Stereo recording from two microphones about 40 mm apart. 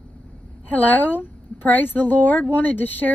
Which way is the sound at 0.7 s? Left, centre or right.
Left.